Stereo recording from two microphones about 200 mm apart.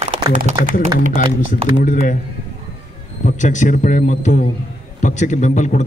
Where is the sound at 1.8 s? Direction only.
40° left (ahead or behind).